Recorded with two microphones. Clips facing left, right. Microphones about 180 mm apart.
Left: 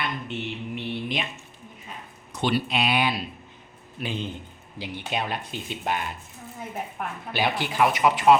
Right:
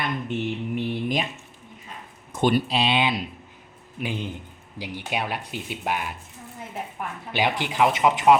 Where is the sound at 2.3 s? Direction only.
50° right (ahead or behind).